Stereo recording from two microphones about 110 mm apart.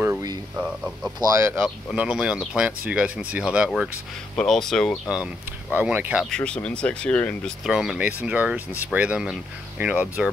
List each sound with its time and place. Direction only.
0.6 s speech: 5° right (ahead or behind)
1.2 s speech: 25° right (ahead or behind)
1.9 s speech: 5° right (ahead or behind)
4.4 s speech: 5° left (ahead or behind)
5.8 s speech: 15° right (ahead or behind)
6.3 s speech: 10° left (ahead or behind)
7.6 s speech: 5° right (ahead or behind)